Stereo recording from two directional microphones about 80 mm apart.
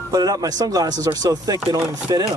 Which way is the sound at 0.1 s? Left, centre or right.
Right.